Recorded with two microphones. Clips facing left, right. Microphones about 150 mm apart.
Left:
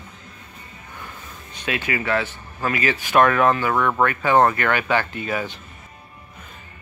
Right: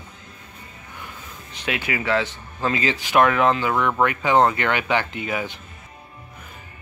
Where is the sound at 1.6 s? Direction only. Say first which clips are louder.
Left 1 dB; 15° right (ahead or behind).